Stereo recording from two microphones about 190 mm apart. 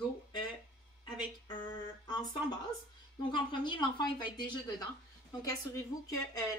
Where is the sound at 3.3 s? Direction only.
25° left (ahead or behind).